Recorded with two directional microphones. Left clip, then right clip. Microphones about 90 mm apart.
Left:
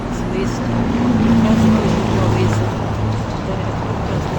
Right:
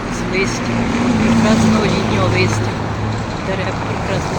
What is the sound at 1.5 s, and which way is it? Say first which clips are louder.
Vehicle: right 2 dB; 20° right (ahead or behind).